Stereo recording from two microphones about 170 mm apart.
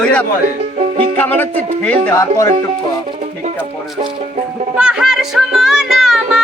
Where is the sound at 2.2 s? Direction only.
20° left (ahead or behind).